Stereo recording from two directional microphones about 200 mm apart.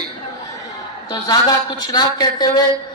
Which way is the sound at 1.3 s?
20° left (ahead or behind).